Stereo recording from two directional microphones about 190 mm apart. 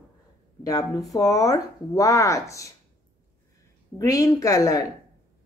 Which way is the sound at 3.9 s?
15° left (ahead or behind).